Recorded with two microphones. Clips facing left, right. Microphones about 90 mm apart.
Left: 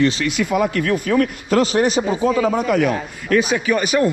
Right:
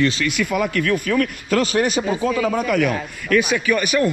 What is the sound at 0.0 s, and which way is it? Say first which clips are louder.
A man's voice: left 2 dB; 25° left (ahead or behind).